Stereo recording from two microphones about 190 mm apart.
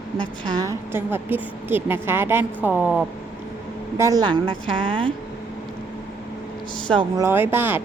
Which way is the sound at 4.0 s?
20° right (ahead or behind).